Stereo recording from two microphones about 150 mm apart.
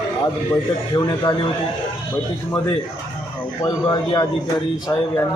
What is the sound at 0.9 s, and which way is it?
Speech, 25° left (ahead or behind).